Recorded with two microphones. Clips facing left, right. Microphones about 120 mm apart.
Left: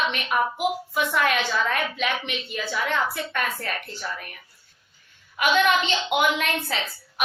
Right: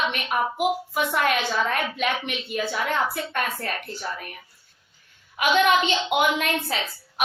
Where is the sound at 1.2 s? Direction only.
35° right (ahead or behind).